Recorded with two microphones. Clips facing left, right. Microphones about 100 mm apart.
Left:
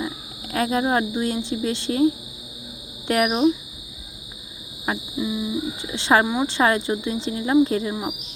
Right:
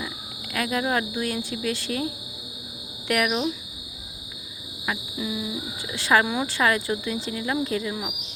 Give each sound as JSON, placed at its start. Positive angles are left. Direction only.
{"t": 0.5, "sound": "speech", "side_deg": 30}
{"t": 3.1, "sound": "speech", "side_deg": 25}
{"t": 5.1, "sound": "a sound", "side_deg": 15}
{"t": 5.9, "sound": "speech", "side_deg": 25}
{"t": 6.2, "sound": "a sound", "side_deg": 15}
{"t": 6.5, "sound": "speech", "side_deg": 25}